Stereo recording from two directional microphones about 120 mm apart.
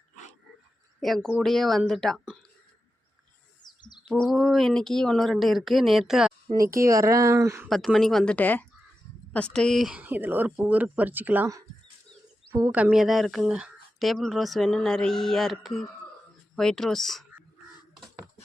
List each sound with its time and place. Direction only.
0.9 s speech: centre (ahead or behind)
3.6 s bird: 35° left (ahead or behind)
4.1 s speech: centre (ahead or behind)
6.5 s speech: 25° right (ahead or behind)
7.9 s speech: centre (ahead or behind); by 11.4 s 15° right (ahead or behind)
12.5 s speech: 25° right (ahead or behind)
12.7 s speech: 10° right (ahead or behind)